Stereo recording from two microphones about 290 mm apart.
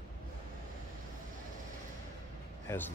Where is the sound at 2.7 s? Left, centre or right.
Centre.